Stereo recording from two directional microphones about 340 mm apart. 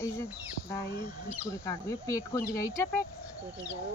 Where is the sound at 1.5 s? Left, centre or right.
Centre.